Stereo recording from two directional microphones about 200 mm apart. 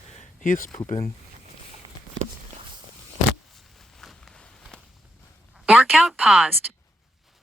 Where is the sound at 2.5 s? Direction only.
35° right (ahead or behind).